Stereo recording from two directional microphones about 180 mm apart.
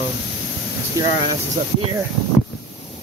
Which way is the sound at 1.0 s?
20° right (ahead or behind).